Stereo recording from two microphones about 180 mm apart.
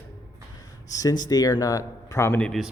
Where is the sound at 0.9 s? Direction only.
20° left (ahead or behind); by 2.7 s 5° left (ahead or behind).